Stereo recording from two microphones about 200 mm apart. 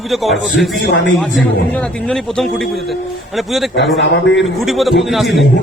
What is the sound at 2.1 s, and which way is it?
Speech, centre (ahead or behind).